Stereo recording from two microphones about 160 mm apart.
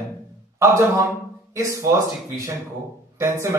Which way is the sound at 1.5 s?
20° right (ahead or behind).